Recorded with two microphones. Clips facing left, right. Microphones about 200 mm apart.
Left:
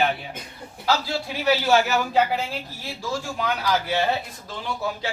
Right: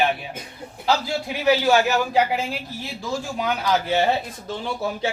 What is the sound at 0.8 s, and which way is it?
A man's voice, 15° right (ahead or behind).